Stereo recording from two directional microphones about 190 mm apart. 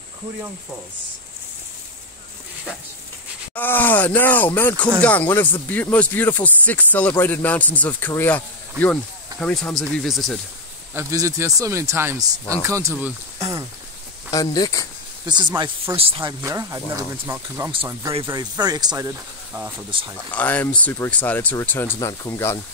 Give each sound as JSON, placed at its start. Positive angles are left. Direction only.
{"t": 3.5, "sound": "speech", "side_deg": 10}
{"t": 11.0, "sound": "speech", "side_deg": -15}
{"t": 14.3, "sound": "speech", "side_deg": 20}
{"t": 15.2, "sound": "speech", "side_deg": -20}
{"t": 19.9, "sound": "speech", "side_deg": -25}
{"t": 20.2, "sound": "speech", "side_deg": 10}